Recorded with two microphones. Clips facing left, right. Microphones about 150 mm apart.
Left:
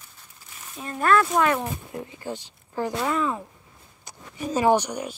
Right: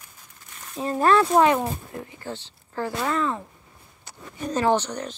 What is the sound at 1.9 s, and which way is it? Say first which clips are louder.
Speech: left 1 dB; 20° left (ahead or behind).